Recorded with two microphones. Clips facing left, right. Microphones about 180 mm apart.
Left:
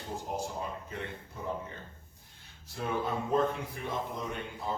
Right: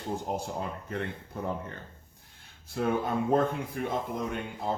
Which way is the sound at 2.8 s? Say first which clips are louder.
Right 5 dB; 55° right (ahead or behind).